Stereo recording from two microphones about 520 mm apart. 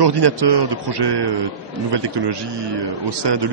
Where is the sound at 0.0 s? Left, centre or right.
Right.